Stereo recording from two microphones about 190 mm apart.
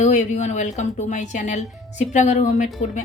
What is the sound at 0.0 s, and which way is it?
A woman's voice, 40° left (ahead or behind).